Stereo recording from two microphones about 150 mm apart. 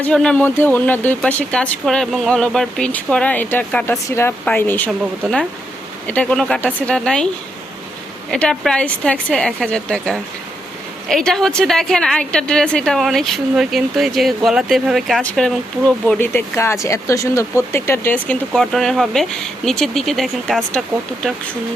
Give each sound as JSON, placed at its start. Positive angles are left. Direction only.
{"t": 0.0, "sound": "a woman's voice", "side_deg": 5}
{"t": 8.3, "sound": "a woman's voice", "side_deg": 5}